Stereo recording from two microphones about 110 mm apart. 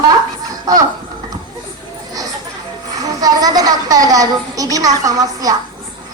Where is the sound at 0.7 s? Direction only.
35° right (ahead or behind).